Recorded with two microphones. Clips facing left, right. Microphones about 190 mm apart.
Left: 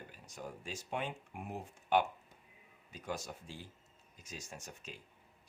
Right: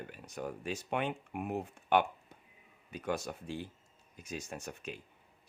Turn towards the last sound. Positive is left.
turn(degrees=-60)  # may be behind; listen again after turning